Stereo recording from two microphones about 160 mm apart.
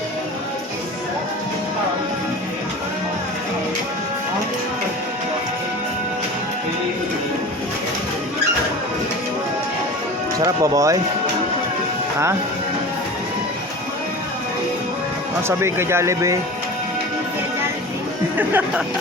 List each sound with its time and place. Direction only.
10.3 s speech: 20° right (ahead or behind)
15.4 s speech: 15° right (ahead or behind)
18.3 s speech: 10° right (ahead or behind)